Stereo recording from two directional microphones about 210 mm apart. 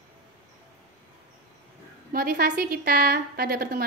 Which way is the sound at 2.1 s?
45° right (ahead or behind).